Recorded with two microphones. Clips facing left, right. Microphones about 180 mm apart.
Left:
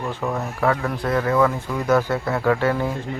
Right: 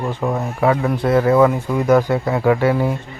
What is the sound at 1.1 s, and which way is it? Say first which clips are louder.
Speech: right 6 dB; 30° right (ahead or behind).